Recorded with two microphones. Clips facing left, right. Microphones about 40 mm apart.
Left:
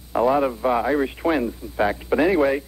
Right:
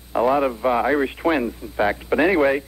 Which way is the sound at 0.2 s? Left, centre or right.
Centre.